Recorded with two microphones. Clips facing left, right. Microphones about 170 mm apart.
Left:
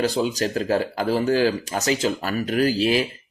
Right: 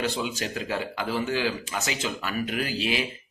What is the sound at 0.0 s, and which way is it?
Speech, 40° left (ahead or behind).